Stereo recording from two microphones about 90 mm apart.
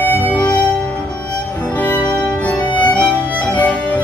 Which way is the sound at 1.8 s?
15° left (ahead or behind).